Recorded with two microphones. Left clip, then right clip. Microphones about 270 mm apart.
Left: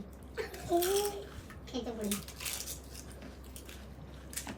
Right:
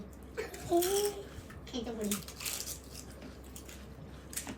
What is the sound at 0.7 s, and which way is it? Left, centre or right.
Speech, right.